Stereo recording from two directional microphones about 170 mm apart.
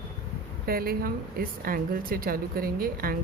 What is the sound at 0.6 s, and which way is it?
A woman's voice, 60° right (ahead or behind).